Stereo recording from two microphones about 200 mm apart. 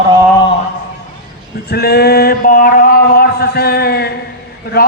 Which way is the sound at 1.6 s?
50° left (ahead or behind).